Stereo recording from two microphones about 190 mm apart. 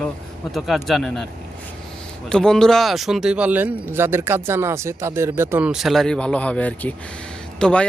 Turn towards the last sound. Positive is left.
turn(degrees=5)  # may be behind; listen again after turning